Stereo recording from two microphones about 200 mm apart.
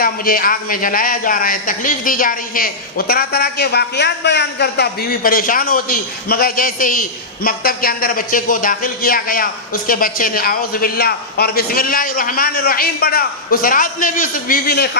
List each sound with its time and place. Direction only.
0.0 s speech: 45° left (ahead or behind)